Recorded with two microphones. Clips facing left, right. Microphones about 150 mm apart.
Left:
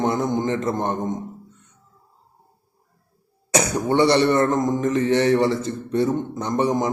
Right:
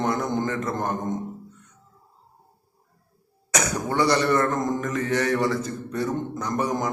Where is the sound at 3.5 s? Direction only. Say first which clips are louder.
Left 5 dB; 25° left (ahead or behind).